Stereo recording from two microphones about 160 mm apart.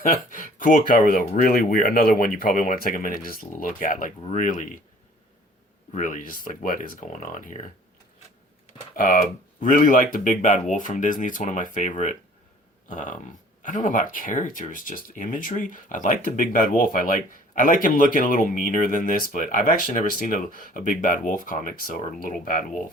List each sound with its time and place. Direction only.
0.0 s speech: 55° left (ahead or behind)
5.9 s speech: 55° left (ahead or behind)
9.0 s speech: 55° left (ahead or behind)